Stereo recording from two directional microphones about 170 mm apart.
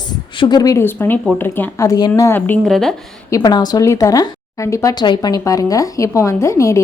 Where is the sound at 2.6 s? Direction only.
Centre (ahead or behind).